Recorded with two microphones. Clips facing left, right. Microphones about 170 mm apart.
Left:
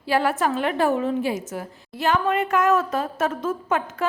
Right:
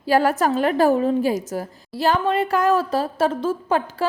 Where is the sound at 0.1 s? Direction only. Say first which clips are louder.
Right 4 dB; 40° right (ahead or behind).